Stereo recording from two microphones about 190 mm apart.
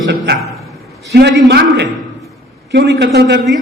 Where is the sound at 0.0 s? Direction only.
60° right (ahead or behind).